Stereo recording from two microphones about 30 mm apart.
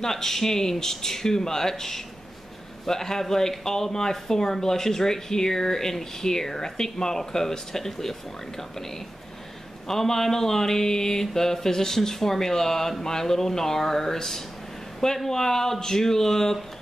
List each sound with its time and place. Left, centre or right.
0.0 s speech: centre